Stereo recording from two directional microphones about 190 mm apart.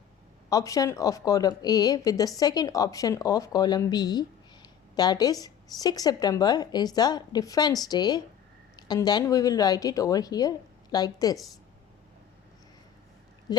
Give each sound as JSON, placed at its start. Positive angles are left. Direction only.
{"t": 0.5, "sound": "a woman's voice", "side_deg": 20}